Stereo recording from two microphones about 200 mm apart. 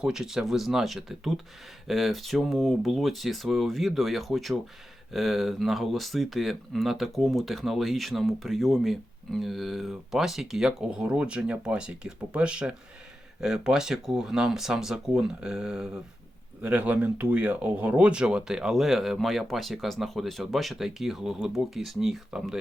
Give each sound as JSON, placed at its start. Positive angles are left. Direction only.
{"t": 0.0, "sound": "speech", "side_deg": -5}